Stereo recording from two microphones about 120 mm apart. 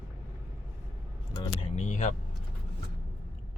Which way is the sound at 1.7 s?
85° left.